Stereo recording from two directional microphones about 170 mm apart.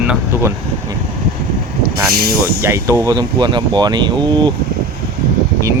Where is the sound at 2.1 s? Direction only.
65° right (ahead or behind).